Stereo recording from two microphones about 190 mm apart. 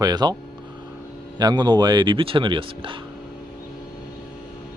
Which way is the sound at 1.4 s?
20° right (ahead or behind).